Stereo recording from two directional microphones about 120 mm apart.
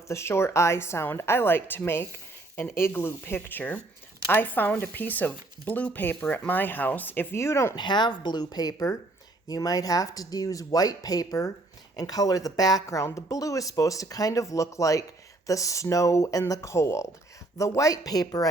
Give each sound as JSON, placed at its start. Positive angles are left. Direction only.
{"t": 0.1, "sound": "speech", "side_deg": 20}
{"t": 7.8, "sound": "speech", "side_deg": 40}